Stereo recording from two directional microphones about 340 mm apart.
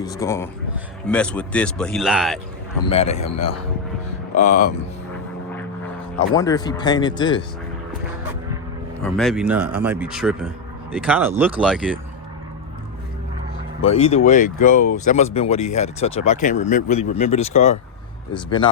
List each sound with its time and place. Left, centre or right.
0.0 s speech: centre
2.9 s speech: centre
6.3 s speech: centre
9.1 s speech: centre
13.8 s speech: centre